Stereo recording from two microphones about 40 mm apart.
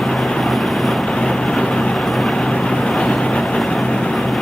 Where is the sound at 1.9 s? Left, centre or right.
Centre.